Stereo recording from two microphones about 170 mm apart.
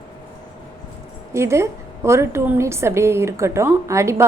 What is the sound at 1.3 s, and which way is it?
A woman's voice, 15° right (ahead or behind).